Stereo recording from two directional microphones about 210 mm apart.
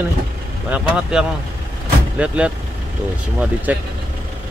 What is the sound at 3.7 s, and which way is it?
Speech, 5° right (ahead or behind).